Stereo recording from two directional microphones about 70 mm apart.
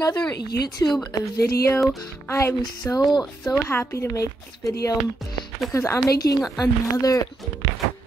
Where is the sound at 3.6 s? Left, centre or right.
Left.